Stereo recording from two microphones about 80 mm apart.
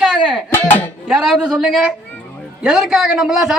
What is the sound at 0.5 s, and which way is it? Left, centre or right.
Speech, left.